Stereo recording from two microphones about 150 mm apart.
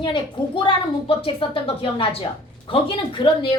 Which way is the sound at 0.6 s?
35° left (ahead or behind).